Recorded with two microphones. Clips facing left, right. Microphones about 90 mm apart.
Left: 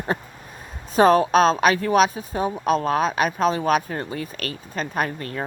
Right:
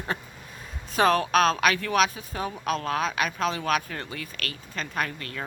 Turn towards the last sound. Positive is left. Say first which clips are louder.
# left 5 dB
turn(degrees=30)  # may be behind; listen again after turning